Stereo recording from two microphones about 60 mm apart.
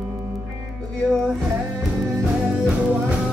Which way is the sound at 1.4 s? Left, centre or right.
Centre.